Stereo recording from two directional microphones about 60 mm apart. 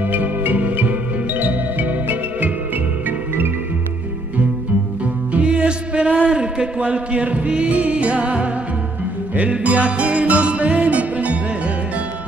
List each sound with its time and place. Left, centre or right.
0.1 s music: right
5.3 s music: centre